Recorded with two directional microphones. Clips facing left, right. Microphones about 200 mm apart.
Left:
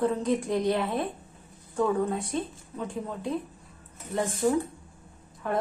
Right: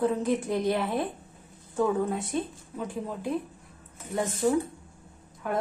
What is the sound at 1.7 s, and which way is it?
A woman's voice, 5° right (ahead or behind).